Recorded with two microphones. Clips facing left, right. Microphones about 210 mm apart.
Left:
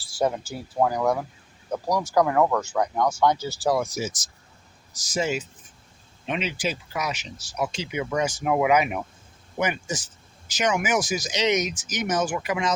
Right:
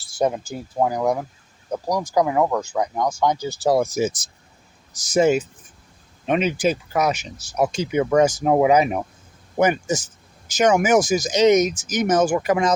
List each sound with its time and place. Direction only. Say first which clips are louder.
0.0 s speech: right 3 dB; 20° right (ahead or behind)
3.8 s speech: right 7 dB; 45° right (ahead or behind)
9.6 s speech: right 8 dB; 45° right (ahead or behind)